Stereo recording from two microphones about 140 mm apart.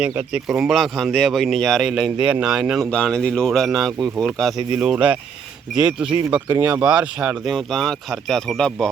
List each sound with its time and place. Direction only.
0.0 s speech: 5° right (ahead or behind)